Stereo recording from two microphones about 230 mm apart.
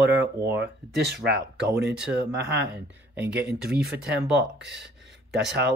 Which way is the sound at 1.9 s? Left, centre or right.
Centre.